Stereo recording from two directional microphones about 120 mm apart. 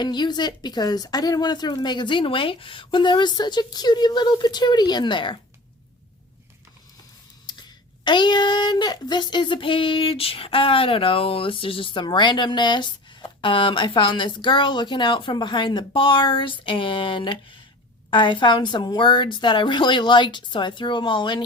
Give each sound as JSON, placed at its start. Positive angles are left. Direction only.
{"t": 0.0, "sound": "a woman's voice", "side_deg": 40}
{"t": 7.4, "sound": "a woman's voice", "side_deg": 40}